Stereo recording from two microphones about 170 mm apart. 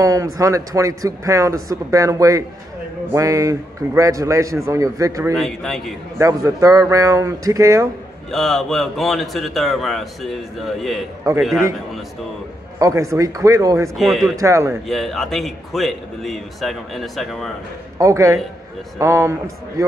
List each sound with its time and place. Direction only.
0.0 s speech: 20° right (ahead or behind)
5.3 s a man's voice: centre (ahead or behind)
6.1 s speech: 20° right (ahead or behind)
8.3 s a man's voice: centre (ahead or behind)
12.7 s speech: 20° right (ahead or behind)
13.9 s a man's voice: centre (ahead or behind)
14.3 s a man's voice: 20° right (ahead or behind)
14.9 s a man's voice: centre (ahead or behind)
17.9 s a man's voice: 20° right (ahead or behind)